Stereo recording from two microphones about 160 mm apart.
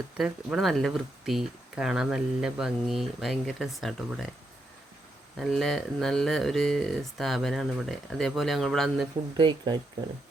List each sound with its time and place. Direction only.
0.2 s speech: centre (ahead or behind)
5.4 s speech: centre (ahead or behind)
9.4 s speech: 30° right (ahead or behind)